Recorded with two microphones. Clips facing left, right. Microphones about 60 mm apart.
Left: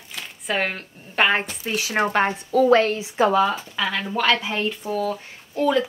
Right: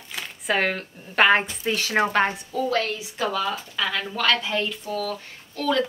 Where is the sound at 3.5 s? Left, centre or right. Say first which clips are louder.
Left 2 dB; centre.